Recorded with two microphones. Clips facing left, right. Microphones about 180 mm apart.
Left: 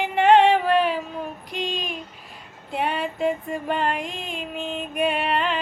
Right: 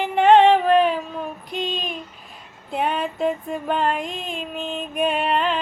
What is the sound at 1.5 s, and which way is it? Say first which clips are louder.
Female singing: right 2 dB; 10° left (ahead or behind).